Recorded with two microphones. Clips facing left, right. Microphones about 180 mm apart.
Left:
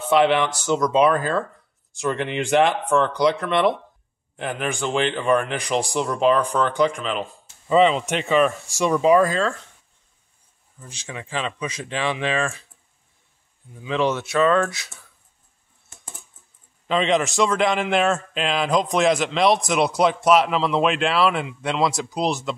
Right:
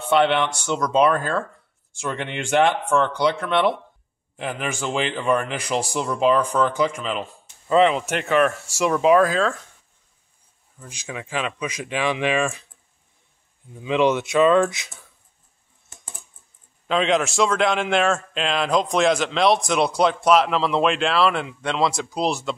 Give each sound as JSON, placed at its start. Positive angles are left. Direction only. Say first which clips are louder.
{"t": 0.1, "sound": "a man's voice", "louder": "left 1 dB", "side_deg": 0}
{"t": 10.8, "sound": "speech", "louder": "right 2 dB", "side_deg": -10}
{"t": 13.8, "sound": "speech", "louder": "right 3 dB", "side_deg": -15}
{"t": 16.8, "sound": "a man's voice", "louder": "even", "side_deg": 0}